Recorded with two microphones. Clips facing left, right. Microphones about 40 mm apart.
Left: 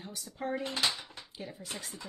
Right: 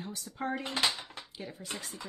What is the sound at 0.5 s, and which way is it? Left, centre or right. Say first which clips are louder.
Speech: left 2 dB; right.